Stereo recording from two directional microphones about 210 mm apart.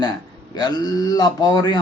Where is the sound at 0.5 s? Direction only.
20° left (ahead or behind).